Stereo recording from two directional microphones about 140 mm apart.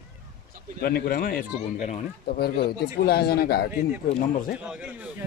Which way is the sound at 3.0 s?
90° left.